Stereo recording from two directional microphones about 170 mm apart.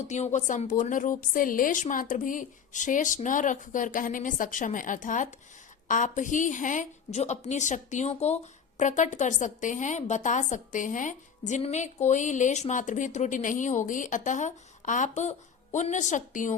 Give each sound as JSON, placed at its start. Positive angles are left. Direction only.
{"t": 0.1, "sound": "a woman's voice", "side_deg": 45}